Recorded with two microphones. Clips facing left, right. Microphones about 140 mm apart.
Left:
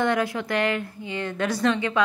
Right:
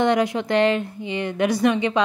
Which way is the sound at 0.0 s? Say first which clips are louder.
Right 4 dB; 20° right (ahead or behind).